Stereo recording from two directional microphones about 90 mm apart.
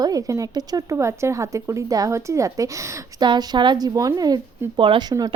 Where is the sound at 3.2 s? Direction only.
50° right (ahead or behind).